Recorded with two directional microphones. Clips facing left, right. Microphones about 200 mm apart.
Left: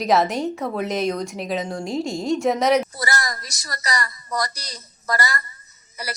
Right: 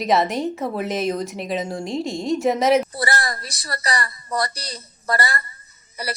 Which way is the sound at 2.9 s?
30° right (ahead or behind).